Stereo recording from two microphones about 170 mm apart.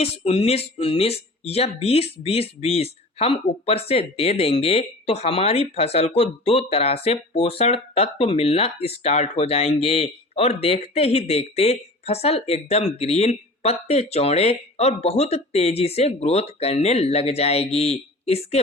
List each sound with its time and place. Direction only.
0.0 s speech: 35° left (ahead or behind)